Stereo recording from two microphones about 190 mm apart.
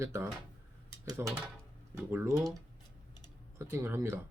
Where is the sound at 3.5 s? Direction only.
15° right (ahead or behind).